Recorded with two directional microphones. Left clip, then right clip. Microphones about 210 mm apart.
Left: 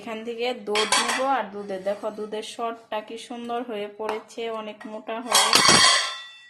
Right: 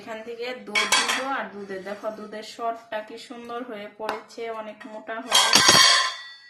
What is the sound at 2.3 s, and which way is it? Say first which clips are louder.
Speech: even; 40° left (ahead or behind).